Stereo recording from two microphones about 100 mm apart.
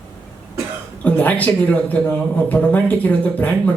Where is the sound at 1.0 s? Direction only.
15° left (ahead or behind).